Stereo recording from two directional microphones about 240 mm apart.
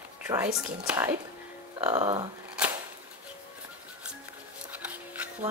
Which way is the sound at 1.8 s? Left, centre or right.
Right.